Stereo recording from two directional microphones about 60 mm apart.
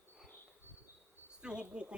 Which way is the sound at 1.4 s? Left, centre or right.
Centre.